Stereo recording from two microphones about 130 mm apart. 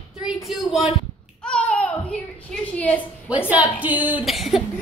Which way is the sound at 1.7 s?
10° left (ahead or behind).